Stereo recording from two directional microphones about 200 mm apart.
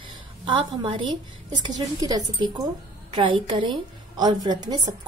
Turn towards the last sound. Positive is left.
turn(degrees=-20)  # may be behind; listen again after turning